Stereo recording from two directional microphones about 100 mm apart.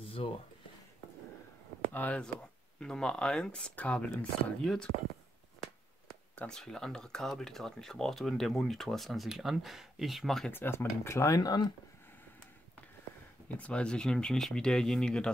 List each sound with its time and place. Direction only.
0.0 s a sound: 65° left (ahead or behind)
2.0 s speech: 10° left (ahead or behind)
6.3 s speech: 10° left (ahead or behind)
10.5 s speech: 20° left (ahead or behind); by 11.7 s 40° left (ahead or behind)
13.6 s speech: 10° left (ahead or behind)